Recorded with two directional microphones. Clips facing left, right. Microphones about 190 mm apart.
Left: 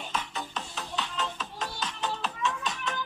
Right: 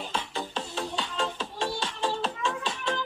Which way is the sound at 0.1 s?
30° right (ahead or behind).